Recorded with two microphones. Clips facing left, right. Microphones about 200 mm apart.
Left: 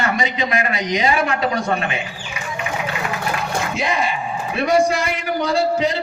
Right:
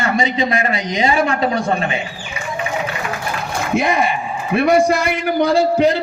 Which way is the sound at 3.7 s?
55° right (ahead or behind).